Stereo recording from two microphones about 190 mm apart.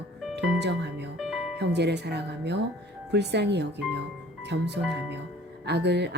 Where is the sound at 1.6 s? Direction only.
65° right (ahead or behind).